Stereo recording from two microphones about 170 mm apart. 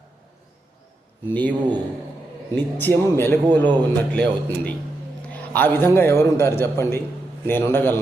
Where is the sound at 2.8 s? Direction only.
15° left (ahead or behind).